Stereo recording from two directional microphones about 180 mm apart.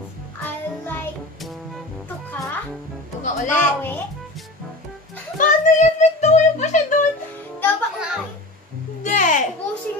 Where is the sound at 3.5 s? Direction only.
10° left (ahead or behind).